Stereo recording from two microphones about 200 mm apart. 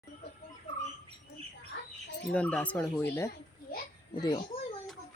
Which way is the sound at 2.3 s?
5° left (ahead or behind).